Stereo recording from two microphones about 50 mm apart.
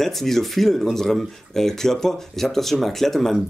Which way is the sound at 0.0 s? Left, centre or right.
Centre.